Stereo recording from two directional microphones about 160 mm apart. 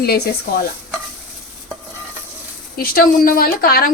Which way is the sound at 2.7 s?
65° left (ahead or behind).